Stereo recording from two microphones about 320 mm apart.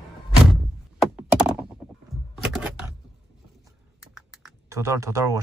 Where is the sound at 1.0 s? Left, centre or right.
Centre.